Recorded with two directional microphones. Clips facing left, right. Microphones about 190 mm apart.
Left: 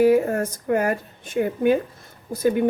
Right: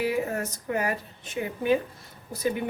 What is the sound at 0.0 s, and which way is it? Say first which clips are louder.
A woman's voice: left 10 dB; 50° left (ahead or behind).